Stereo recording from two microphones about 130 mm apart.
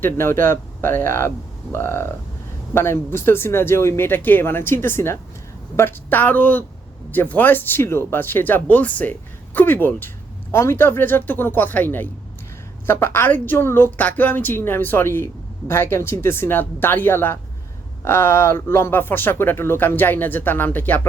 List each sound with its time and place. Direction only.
0.0 s a woman's voice: 20° left (ahead or behind)